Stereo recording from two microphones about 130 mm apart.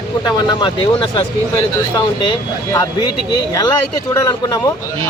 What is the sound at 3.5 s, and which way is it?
Speech, 30° left (ahead or behind).